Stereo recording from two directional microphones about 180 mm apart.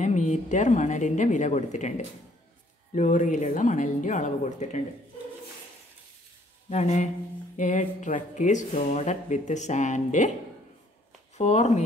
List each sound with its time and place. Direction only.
0.0 s a woman's voice: 40° left (ahead or behind)
6.7 s a woman's voice: 40° left (ahead or behind)
11.3 s speech: 40° left (ahead or behind)